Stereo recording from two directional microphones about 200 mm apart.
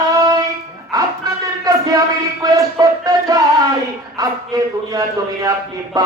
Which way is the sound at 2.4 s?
20° right (ahead or behind).